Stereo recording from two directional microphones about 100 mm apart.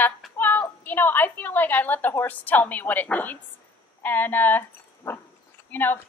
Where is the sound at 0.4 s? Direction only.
20° left (ahead or behind).